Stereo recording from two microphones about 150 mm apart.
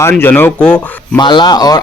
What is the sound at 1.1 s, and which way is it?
Speech, 30° left (ahead or behind).